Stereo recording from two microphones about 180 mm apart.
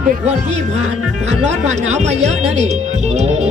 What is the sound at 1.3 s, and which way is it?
Speech, 40° right (ahead or behind).